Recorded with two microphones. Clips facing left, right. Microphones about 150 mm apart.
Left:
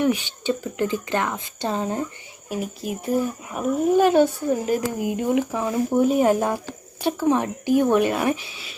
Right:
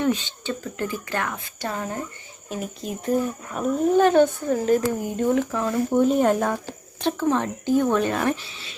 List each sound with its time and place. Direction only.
0.0 s speech: 15° left (ahead or behind)
2.5 s speech: 5° left (ahead or behind)